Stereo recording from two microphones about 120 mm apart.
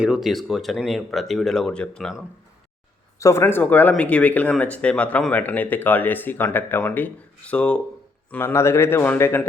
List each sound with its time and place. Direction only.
0.0 s speech: 5° right (ahead or behind)
3.2 s speech: 25° left (ahead or behind)
3.4 s a man's voice: 15° left (ahead or behind)